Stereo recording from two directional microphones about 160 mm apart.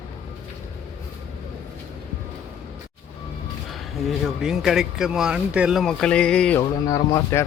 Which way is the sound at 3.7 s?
Centre (ahead or behind).